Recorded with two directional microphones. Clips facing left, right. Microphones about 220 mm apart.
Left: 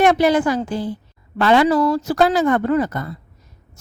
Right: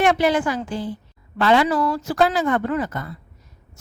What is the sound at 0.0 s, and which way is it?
A woman's voice, 40° left (ahead or behind).